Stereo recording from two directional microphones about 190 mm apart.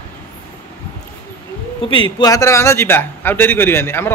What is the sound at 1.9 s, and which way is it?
A man's voice, 25° left (ahead or behind).